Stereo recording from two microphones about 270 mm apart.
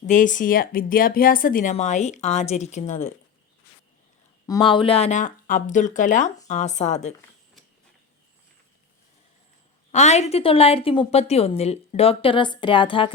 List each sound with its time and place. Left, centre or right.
0.0 s a woman's voice: left
4.4 s a woman's voice: centre
9.9 s a woman's voice: left